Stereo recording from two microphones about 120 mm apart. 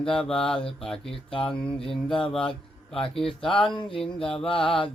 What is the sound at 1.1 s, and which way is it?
Speech, 45° left (ahead or behind).